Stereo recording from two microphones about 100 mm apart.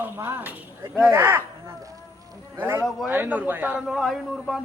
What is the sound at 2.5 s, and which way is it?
A man's voice, 25° right (ahead or behind).